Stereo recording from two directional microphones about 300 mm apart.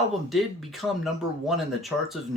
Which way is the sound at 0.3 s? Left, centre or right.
Centre.